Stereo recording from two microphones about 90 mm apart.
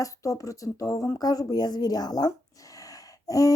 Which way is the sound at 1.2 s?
45° left (ahead or behind).